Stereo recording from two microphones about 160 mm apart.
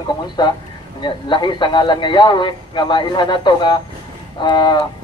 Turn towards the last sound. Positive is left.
turn(degrees=25)  # may be behind; listen again after turning